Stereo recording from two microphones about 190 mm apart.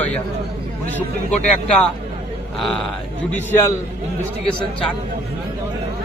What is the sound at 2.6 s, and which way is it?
Speech, 5° left (ahead or behind).